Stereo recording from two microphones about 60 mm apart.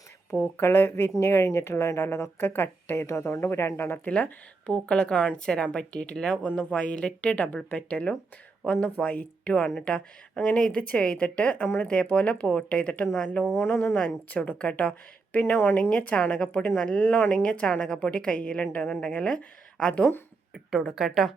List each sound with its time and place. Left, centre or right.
0.5 s a woman's voice: left
3.4 s speech: left
4.0 s a woman's voice: left
6.5 s a woman's voice: left; by 13.4 s centre
14.3 s a woman's voice: left
15.5 s a woman's voice: left; by 19.9 s centre
20.5 s a woman's voice: centre